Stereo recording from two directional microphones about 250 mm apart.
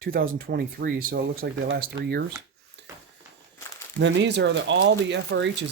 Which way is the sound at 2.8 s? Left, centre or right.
Right.